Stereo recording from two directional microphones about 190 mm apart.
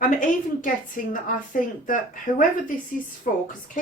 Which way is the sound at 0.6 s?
45° left (ahead or behind).